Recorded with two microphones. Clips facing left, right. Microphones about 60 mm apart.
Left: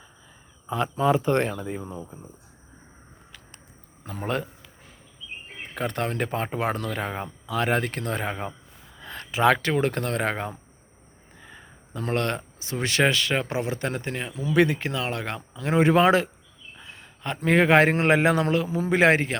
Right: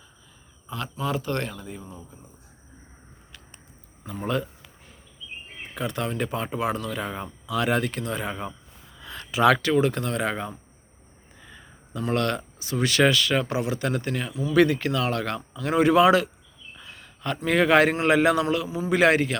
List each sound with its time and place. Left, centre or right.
0.7 s speech: left
4.2 s speech: left
5.7 s speech: left
16.7 s a sound: left
17.4 s speech: left